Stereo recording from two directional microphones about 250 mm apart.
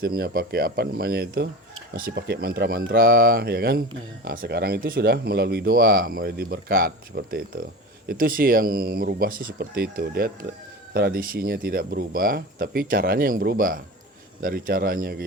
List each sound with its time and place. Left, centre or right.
0.0 s speech: right